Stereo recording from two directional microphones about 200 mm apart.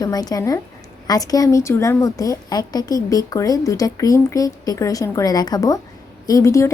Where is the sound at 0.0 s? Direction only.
20° left (ahead or behind).